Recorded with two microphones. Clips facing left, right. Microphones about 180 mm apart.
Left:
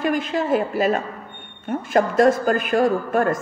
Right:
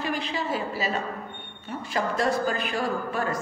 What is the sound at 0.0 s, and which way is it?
Speech, 50° left (ahead or behind).